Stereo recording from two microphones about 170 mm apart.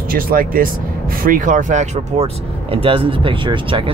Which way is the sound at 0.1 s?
55° right (ahead or behind).